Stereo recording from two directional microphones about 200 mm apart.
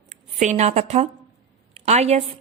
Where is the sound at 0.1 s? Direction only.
35° right (ahead or behind).